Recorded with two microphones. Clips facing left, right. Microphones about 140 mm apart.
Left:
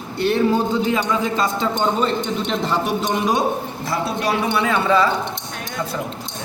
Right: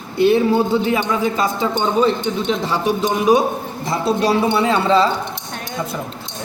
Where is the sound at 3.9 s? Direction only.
30° right (ahead or behind).